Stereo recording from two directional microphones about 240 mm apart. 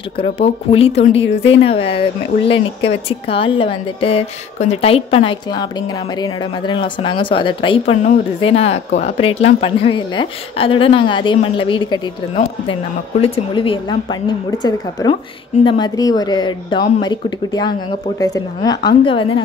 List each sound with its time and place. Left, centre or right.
0.2 s a woman's voice: left